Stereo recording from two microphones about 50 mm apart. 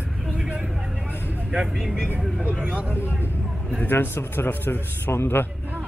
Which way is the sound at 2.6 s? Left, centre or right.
Right.